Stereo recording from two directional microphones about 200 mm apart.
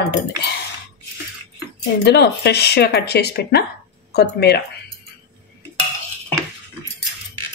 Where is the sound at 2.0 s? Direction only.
55° left (ahead or behind).